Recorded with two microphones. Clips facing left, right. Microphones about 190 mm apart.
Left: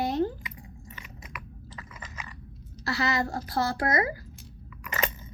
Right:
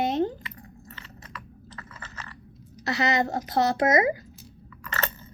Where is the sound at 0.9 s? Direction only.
10° left (ahead or behind).